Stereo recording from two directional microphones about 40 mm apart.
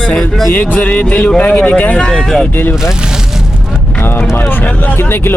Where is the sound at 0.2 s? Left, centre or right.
Centre.